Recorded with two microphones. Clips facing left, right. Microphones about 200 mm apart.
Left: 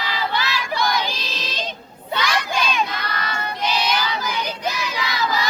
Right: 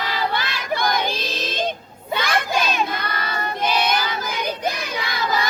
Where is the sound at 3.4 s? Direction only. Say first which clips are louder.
Right 3 dB; 50° right (ahead or behind).